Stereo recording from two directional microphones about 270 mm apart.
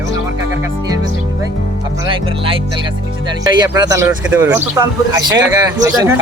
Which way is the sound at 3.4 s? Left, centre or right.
Centre.